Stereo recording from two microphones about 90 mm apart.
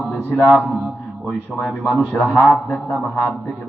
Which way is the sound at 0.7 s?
Centre (ahead or behind).